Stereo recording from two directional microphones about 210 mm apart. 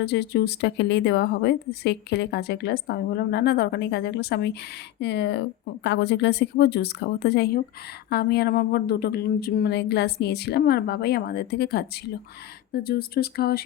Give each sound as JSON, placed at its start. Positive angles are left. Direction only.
{"t": 0.0, "sound": "speech", "side_deg": 50}